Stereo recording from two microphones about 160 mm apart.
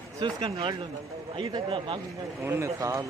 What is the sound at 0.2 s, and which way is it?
A man's voice, 35° right (ahead or behind).